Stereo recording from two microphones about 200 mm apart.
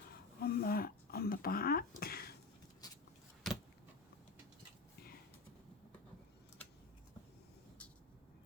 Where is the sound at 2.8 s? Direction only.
20° left (ahead or behind).